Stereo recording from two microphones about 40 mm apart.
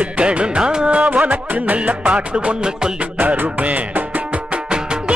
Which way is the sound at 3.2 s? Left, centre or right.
Right.